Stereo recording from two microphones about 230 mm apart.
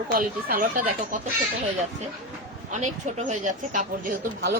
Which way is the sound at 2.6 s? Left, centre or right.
Right.